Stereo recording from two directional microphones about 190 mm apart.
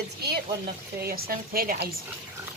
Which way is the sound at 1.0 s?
50° right (ahead or behind).